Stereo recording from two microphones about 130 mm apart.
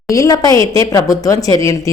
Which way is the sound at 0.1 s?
25° left (ahead or behind).